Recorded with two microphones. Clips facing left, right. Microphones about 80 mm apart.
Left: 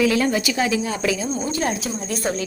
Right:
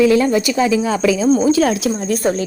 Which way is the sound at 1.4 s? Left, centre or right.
Right.